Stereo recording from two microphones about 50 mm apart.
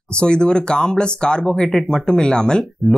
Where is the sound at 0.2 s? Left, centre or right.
Centre.